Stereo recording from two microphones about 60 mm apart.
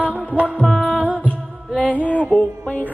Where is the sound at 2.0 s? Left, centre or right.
Left.